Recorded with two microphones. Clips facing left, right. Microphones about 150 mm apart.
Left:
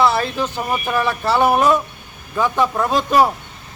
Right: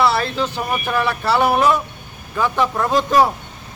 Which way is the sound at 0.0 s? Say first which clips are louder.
Left 1 dB; 15° left (ahead or behind).